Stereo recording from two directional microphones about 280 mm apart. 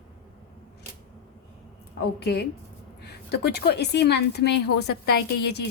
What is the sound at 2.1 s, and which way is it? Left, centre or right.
A woman's voice, left.